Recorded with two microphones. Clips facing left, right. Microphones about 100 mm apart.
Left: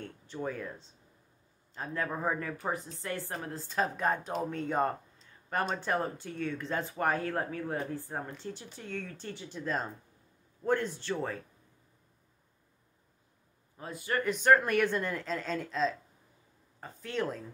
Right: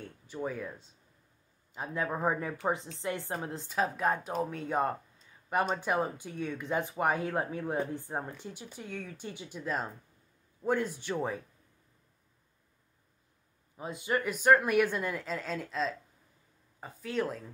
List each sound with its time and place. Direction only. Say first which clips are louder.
0.0 s a woman's voice: even; 5° right (ahead or behind)
3.6 s speech: even; 5° right (ahead or behind)
13.7 s a woman's voice: right 2 dB; 20° right (ahead or behind)
14.2 s speech: even; 5° right (ahead or behind)